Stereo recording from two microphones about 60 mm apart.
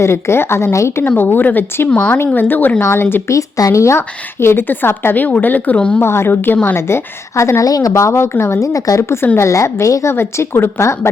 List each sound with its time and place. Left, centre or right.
0.0 s a woman's voice: left
1.0 s a woman's voice: left
1.9 s speech: centre
2.1 s a woman's voice: left
2.8 s a woman's voice: left
3.2 s a woman's voice: left
6.0 s a woman's voice: left
7.6 s speech: left
7.9 s speech: left
8.6 s a woman's voice: left
9.4 s a woman's voice: left